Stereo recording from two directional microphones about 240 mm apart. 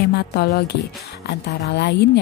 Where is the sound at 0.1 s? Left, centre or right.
Left.